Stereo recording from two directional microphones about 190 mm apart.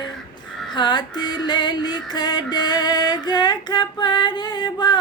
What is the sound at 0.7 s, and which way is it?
Female singing, 25° left (ahead or behind).